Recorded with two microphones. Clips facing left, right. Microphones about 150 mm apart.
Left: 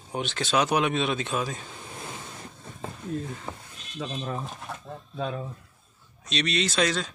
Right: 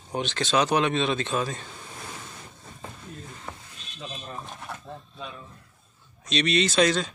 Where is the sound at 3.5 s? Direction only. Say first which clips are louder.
Left 2 dB; 20° left (ahead or behind).